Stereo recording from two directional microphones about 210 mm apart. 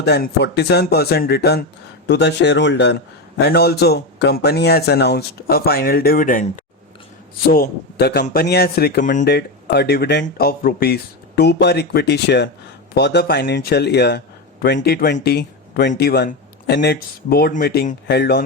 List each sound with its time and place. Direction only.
0.0 s speech: 50° left (ahead or behind)
7.5 s speech: 45° left (ahead or behind)